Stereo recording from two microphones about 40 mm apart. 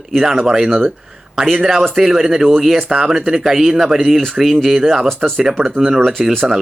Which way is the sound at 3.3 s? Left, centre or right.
Centre.